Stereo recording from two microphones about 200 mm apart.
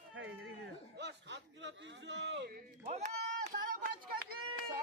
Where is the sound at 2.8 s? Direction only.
35° right (ahead or behind).